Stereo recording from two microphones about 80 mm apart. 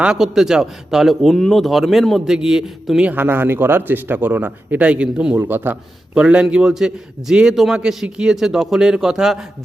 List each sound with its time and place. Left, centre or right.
0.0 s speech: centre
3.1 s speech: right
5.4 s speech: right
6.1 s a man's voice: centre